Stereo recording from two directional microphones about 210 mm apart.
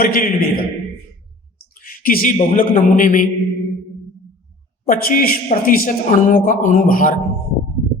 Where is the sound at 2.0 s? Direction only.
45° left (ahead or behind).